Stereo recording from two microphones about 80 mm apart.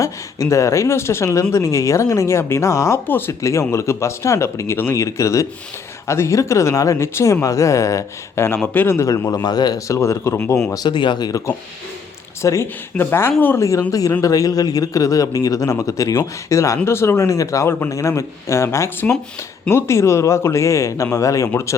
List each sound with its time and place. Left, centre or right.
0.0 s speech: left
9.0 s speech: left
9.8 s speech: left
10.8 s speech: left
12.4 s speech: left
13.6 s speech: left